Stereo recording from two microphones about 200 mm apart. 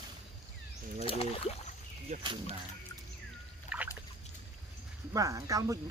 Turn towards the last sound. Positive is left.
turn(degrees=-15)  # may be behind; listen again after turning